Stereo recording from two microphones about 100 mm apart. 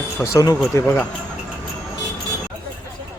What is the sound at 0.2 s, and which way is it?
Speech, 30° left (ahead or behind).